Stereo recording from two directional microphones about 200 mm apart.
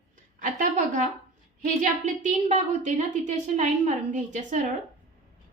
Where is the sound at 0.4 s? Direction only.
40° right (ahead or behind).